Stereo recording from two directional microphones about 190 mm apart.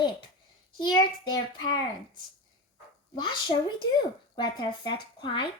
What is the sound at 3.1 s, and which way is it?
Speech, 25° left (ahead or behind).